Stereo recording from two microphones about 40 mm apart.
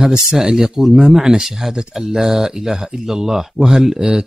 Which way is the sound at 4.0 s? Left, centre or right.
Right.